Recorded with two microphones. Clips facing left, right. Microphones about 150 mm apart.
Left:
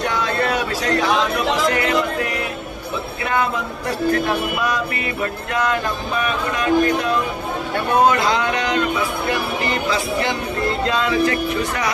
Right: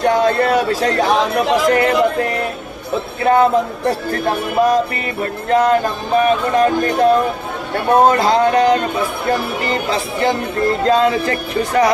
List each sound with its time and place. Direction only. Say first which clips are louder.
0.0 s speech: right 7 dB; 40° right (ahead or behind)
4.5 s music: right 8 dB; 45° right (ahead or behind)
5.2 s speech: right 8 dB; 40° right (ahead or behind)